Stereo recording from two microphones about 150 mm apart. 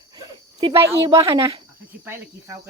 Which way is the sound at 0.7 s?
15° right (ahead or behind).